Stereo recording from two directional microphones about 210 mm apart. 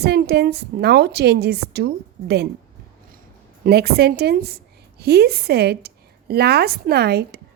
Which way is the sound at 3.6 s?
50° right (ahead or behind).